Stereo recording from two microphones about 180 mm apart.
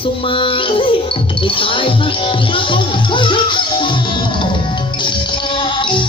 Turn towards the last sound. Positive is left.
turn(degrees=25)  # may be behind; listen again after turning